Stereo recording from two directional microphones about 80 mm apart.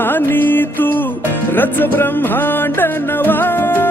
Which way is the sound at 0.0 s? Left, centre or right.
Left.